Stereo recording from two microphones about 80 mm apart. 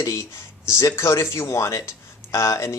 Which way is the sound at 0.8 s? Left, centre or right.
Left.